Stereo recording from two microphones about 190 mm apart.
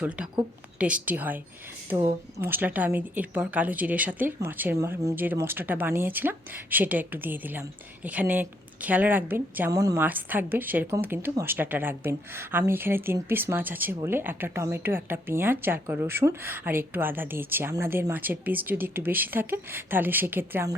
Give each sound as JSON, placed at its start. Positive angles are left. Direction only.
{"t": 0.0, "sound": "speech", "side_deg": -5}